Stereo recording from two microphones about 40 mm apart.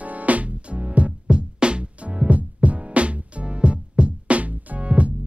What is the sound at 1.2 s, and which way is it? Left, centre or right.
Music, right.